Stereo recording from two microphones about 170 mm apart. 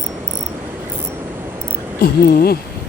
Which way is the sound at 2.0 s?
65° left (ahead or behind).